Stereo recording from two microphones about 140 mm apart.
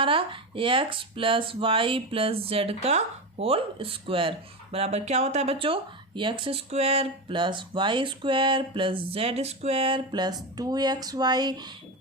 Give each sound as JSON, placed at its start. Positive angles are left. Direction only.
{"t": 0.0, "sound": "speech", "side_deg": -40}